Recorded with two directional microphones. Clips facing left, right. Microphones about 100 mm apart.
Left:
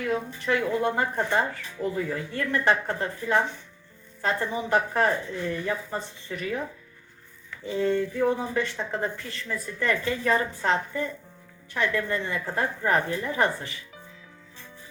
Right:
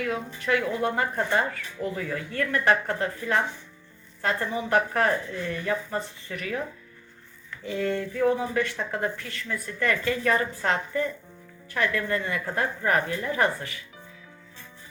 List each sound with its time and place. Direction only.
0.0 s speech: 30° left (ahead or behind)
7.6 s speech: 25° left (ahead or behind)